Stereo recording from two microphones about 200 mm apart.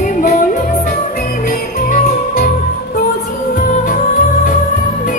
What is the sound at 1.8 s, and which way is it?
Music, 40° left (ahead or behind).